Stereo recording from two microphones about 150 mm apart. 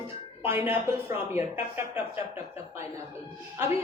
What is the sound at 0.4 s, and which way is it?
Speech, 15° right (ahead or behind).